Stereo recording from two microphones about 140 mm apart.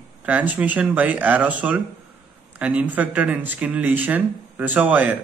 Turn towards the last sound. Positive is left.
turn(degrees=-10)  # may be behind; listen again after turning